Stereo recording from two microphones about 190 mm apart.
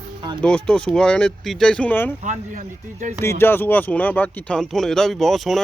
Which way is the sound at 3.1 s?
10° left (ahead or behind).